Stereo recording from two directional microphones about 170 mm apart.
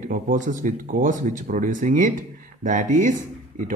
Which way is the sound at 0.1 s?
50° right (ahead or behind).